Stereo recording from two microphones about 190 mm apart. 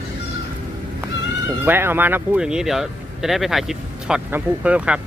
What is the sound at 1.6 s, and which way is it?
Speech, 10° right (ahead or behind).